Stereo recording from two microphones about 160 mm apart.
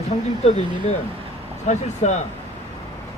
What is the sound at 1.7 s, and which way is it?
Speech, 45° left (ahead or behind).